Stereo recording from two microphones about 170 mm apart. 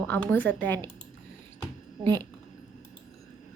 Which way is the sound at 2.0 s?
15° left (ahead or behind).